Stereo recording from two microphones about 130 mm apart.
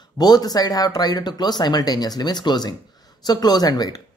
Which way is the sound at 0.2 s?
30° left (ahead or behind).